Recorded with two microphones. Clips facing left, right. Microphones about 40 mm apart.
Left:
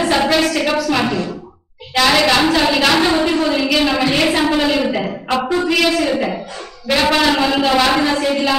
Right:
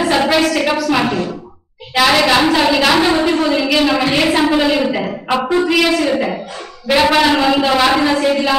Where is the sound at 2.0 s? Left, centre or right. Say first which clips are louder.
Right 1 dB; centre.